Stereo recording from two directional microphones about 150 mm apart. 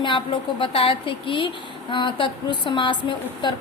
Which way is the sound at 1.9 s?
30° left (ahead or behind).